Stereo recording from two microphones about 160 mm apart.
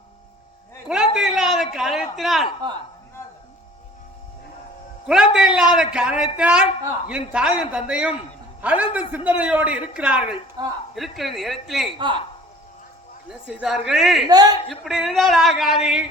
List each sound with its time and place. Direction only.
1.1 s a sound: 5° right (ahead or behind)
1.7 s speech: centre (ahead or behind)
5.0 s a man's voice: 5° right (ahead or behind)
10.6 s a man's voice: 25° right (ahead or behind)
10.9 s speech: centre (ahead or behind)
11.9 s a man's voice: 30° right (ahead or behind)
13.2 s speech: 5° right (ahead or behind)
14.3 s a man's voice: 25° right (ahead or behind)
14.7 s speech: centre (ahead or behind)